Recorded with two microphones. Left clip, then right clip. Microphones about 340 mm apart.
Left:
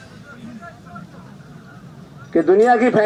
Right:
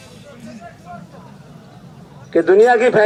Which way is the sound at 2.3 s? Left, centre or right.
Right.